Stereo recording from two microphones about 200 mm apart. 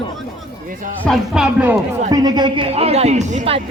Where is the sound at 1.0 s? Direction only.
Centre (ahead or behind).